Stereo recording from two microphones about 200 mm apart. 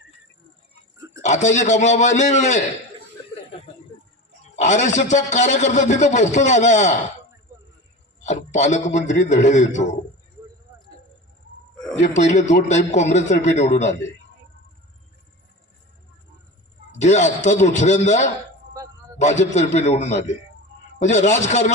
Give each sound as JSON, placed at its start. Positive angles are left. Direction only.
{"t": 1.2, "sound": "a man's voice", "side_deg": 35}
{"t": 4.5, "sound": "a man's voice", "side_deg": 35}
{"t": 8.2, "sound": "a man's voice", "side_deg": 35}
{"t": 11.9, "sound": "a man's voice", "side_deg": 35}
{"t": 17.0, "sound": "a man's voice", "side_deg": 35}
{"t": 18.8, "sound": "a sound", "side_deg": -15}
{"t": 19.2, "sound": "a man's voice", "side_deg": 35}